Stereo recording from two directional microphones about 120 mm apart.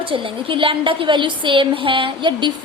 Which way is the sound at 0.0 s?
45° right (ahead or behind).